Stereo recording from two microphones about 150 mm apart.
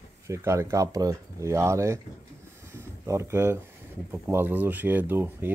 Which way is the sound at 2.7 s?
15° right (ahead or behind).